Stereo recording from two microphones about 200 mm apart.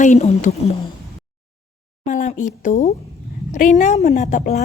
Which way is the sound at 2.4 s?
40° left (ahead or behind).